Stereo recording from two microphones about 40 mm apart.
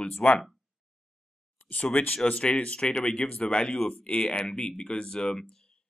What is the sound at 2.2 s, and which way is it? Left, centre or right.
A man's voice, left.